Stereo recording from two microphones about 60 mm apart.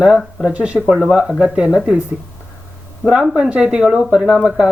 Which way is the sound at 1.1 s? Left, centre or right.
Centre.